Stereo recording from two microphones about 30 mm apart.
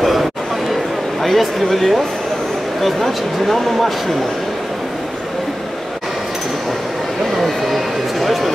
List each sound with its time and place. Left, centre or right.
0.0 s chatter: centre
1.2 s speech: centre
7.4 s a sound: centre